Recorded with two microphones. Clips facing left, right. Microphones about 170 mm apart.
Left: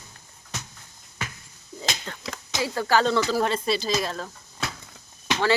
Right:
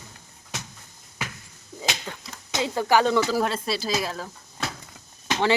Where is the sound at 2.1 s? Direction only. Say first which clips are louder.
Right 1 dB; 10° right (ahead or behind).